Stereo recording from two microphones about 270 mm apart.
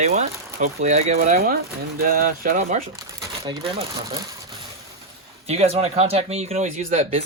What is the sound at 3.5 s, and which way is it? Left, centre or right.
Speech, centre.